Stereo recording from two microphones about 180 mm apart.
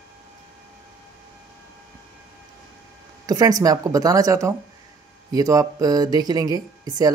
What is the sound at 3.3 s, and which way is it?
Speech, 20° right (ahead or behind).